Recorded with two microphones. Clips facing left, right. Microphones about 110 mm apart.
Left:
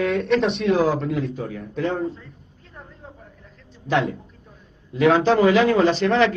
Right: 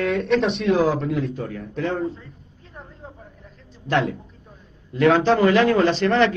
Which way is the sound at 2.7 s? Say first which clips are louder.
Right 2 dB; 20° right (ahead or behind).